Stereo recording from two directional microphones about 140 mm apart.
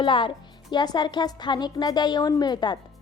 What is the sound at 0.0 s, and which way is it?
Speech, 35° left (ahead or behind).